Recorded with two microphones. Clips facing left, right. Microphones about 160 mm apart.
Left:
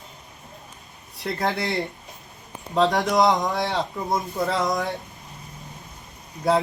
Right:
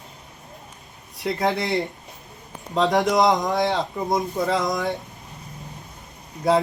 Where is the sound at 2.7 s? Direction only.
Centre (ahead or behind).